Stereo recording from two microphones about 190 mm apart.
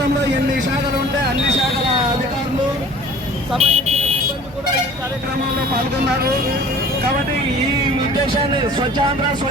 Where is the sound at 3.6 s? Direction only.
35° right (ahead or behind).